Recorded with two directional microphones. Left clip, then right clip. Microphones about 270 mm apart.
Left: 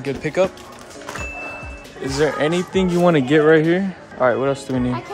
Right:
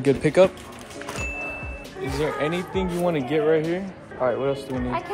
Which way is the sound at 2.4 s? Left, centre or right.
Left.